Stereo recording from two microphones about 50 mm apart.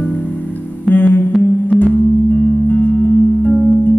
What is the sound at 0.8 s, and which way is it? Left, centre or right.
Music, left.